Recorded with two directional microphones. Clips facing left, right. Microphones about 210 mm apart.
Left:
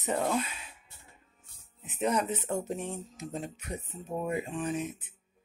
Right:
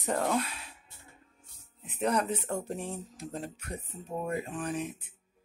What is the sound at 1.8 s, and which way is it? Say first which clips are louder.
Speech: even; 5° left (ahead or behind).